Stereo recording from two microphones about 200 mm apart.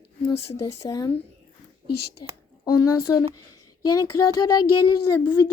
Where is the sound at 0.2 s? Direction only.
30° left (ahead or behind).